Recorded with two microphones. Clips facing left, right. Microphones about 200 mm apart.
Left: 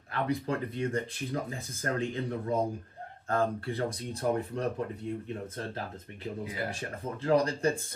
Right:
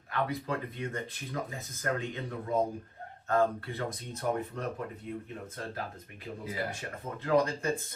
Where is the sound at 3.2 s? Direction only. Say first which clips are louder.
Right 1 dB; 30° left (ahead or behind).